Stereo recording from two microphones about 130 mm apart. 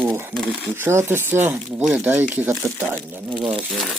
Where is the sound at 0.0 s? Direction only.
15° right (ahead or behind).